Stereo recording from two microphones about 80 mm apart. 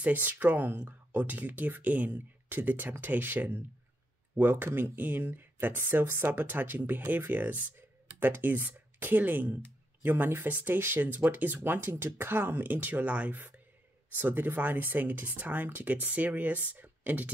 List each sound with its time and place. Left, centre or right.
0.0 s speech: right